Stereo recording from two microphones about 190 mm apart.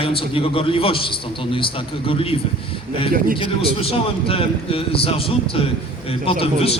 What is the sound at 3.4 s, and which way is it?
A man's voice, 30° left (ahead or behind).